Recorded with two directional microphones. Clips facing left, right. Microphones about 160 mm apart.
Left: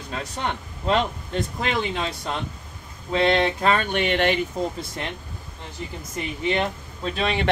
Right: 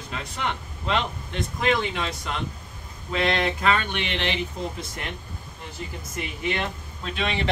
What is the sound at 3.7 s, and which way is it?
Speech, 45° left (ahead or behind).